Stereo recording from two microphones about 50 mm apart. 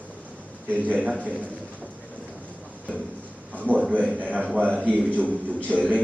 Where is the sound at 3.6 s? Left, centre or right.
Right.